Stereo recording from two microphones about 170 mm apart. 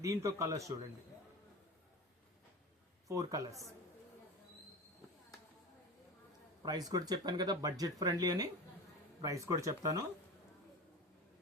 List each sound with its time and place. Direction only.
0.0 s a man's voice: 15° right (ahead or behind)
3.1 s speech: 20° right (ahead or behind)
6.6 s speech: 25° right (ahead or behind)